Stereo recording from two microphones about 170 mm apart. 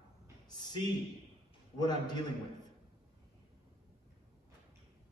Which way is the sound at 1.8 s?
25° left (ahead or behind).